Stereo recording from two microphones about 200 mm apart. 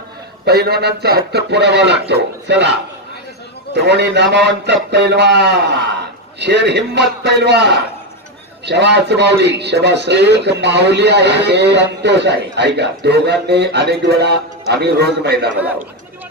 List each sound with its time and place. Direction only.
0.5 s speech: 55° right (ahead or behind)
3.7 s speech: 60° right (ahead or behind)